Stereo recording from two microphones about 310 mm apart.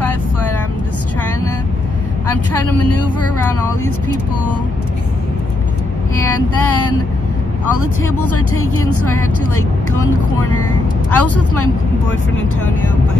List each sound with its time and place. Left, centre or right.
6.3 s speech: left